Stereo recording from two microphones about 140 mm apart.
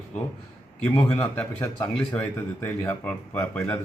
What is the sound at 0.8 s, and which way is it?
A man's voice, 15° left (ahead or behind).